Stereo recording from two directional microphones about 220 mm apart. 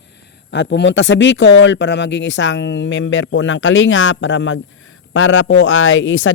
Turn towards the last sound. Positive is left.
turn(degrees=60)  # may be behind; listen again after turning